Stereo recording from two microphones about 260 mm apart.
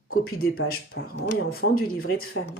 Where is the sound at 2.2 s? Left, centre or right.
Left.